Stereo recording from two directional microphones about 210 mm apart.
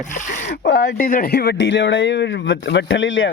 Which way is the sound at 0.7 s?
50° left (ahead or behind).